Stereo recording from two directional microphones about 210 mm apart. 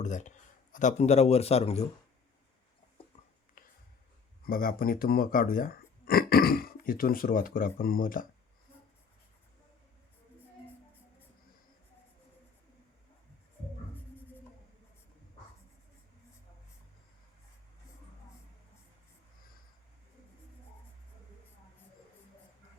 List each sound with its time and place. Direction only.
0.0 s speech: 35° left (ahead or behind)
4.4 s speech: 45° left (ahead or behind)